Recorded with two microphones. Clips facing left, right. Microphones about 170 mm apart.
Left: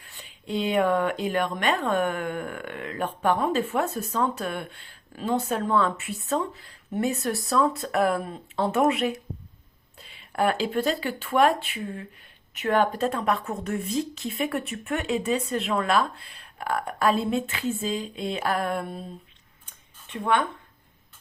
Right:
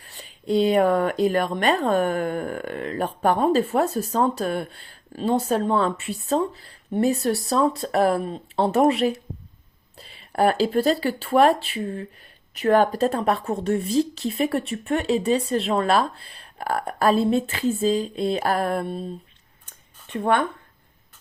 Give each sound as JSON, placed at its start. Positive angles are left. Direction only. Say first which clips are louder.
{"t": 0.0, "sound": "speech", "louder": "right 7 dB", "side_deg": -35}
{"t": 20.1, "sound": "speech", "louder": "right 3 dB", "side_deg": -40}